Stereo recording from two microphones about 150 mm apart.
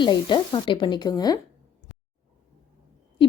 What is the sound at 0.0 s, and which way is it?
Speech, 30° left (ahead or behind).